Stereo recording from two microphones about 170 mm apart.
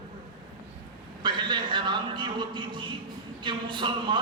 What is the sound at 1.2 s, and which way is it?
A man's voice, 25° right (ahead or behind).